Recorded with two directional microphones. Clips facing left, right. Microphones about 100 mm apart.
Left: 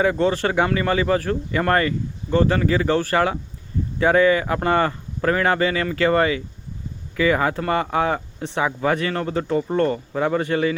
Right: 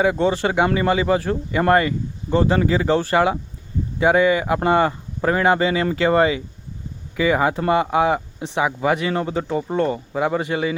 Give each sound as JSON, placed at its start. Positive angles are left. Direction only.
{"t": 0.0, "sound": "speech", "side_deg": -15}